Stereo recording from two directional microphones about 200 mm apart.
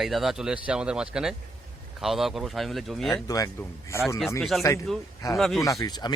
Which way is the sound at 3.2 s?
15° left (ahead or behind).